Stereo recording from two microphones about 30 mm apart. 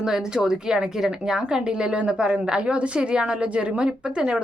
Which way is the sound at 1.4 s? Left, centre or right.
Right.